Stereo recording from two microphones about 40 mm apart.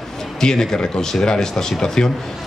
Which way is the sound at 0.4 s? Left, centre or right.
Centre.